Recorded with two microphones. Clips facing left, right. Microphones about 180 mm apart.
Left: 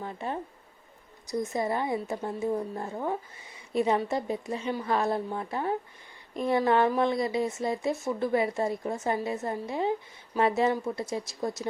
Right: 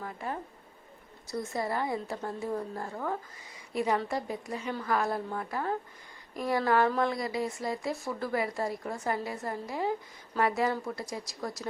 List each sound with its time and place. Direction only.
0.0 s a woman's voice: 25° left (ahead or behind)